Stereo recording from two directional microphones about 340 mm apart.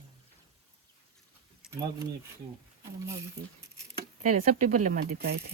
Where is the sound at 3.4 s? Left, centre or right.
Right.